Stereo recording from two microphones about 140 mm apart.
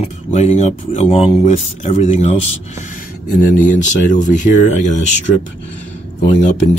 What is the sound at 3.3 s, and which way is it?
Speech, 75° left (ahead or behind).